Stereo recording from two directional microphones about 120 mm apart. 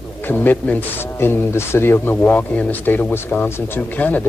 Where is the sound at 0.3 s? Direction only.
15° left (ahead or behind).